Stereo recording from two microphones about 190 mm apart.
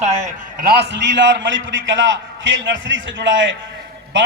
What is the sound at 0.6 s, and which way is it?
A man's voice, 60° right (ahead or behind).